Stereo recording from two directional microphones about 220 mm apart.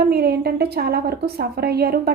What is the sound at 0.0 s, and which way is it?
A woman's voice, 45° right (ahead or behind).